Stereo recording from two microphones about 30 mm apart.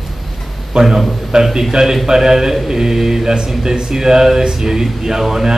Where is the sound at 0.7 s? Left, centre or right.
Right.